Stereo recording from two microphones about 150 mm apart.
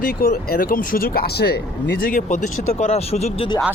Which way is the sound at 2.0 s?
60° left (ahead or behind).